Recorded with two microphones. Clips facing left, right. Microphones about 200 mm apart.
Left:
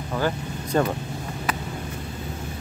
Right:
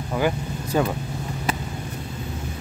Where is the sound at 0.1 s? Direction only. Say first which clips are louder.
Right 2 dB; 10° right (ahead or behind).